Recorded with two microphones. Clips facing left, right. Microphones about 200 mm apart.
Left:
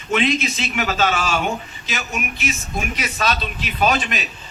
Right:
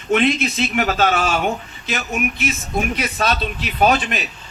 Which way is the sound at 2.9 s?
55° right (ahead or behind).